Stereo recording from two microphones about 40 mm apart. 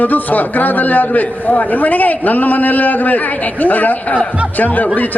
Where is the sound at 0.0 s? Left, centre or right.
Left.